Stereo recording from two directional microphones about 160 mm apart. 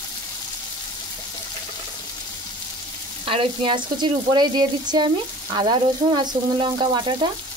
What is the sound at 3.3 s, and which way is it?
Speech, 30° right (ahead or behind).